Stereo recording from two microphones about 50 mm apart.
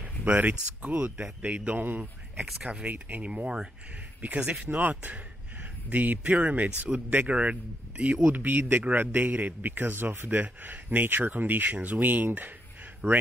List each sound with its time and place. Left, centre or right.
0.0 s a sound: right
0.7 s speech: right
1.8 s a man's voice: right
2.3 s speech: centre
2.8 s a man's voice: right